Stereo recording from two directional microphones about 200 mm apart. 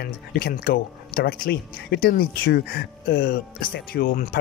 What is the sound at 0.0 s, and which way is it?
Speech, 50° left (ahead or behind).